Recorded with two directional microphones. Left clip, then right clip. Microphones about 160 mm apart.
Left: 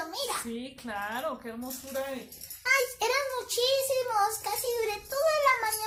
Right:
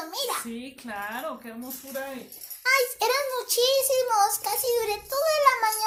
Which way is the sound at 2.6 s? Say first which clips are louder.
Right 4 dB; 45° right (ahead or behind).